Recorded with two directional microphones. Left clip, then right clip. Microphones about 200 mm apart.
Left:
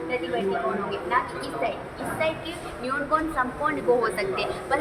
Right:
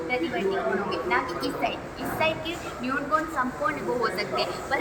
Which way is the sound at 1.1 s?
10° left (ahead or behind).